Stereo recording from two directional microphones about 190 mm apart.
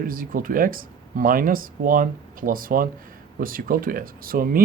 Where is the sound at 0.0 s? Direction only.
50° right (ahead or behind).